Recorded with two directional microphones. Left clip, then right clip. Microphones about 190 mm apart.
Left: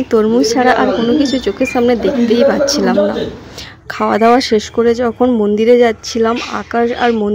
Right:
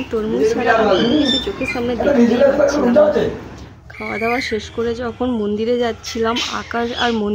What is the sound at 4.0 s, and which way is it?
Speech, 45° left (ahead or behind).